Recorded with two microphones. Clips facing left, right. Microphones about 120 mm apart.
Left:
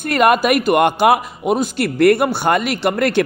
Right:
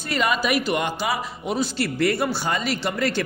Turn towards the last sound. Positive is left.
turn(degrees=60)  # may be behind; listen again after turning